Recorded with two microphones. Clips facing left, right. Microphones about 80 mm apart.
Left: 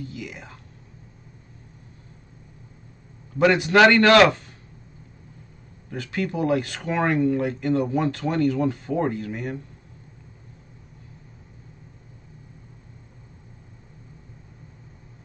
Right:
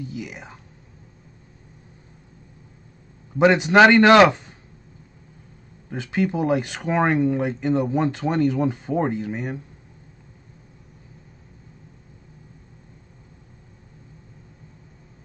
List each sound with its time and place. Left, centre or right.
0.0 s speech: centre
3.3 s speech: right
5.9 s speech: centre